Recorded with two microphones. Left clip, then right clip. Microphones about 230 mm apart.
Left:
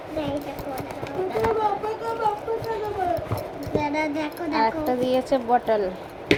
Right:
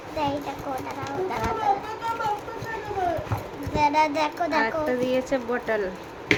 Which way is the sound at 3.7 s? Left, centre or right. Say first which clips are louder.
Right 4 dB; right.